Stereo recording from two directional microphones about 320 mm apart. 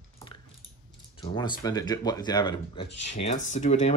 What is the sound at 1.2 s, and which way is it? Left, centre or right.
Speech, centre.